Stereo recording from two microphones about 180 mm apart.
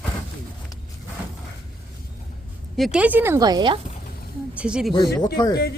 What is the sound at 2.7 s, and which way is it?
Speech, centre (ahead or behind).